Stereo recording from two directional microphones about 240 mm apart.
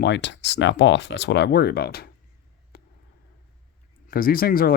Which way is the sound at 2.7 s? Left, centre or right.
Left.